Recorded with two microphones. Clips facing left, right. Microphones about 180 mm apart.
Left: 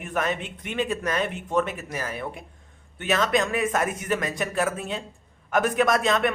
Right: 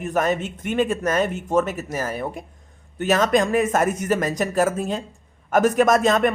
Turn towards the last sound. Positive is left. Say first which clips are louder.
# right 5 dB
turn(degrees=-45)  # may be behind; listen again after turning